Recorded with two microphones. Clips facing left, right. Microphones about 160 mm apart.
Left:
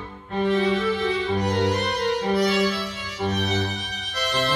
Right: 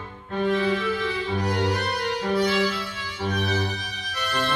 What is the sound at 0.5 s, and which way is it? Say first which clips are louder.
Music: left 2 dB; 30° left (ahead or behind).